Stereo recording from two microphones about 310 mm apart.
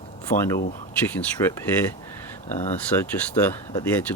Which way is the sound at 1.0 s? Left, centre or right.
Centre.